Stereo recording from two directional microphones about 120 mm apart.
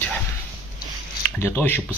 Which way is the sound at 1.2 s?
15° left (ahead or behind).